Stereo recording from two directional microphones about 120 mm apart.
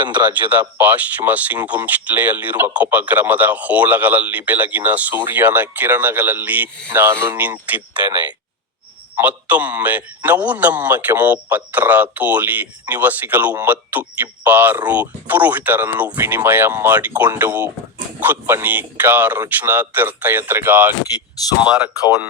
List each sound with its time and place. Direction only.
0.4 s speech: 15° right (ahead or behind)
9.1 s speech: 15° right (ahead or behind)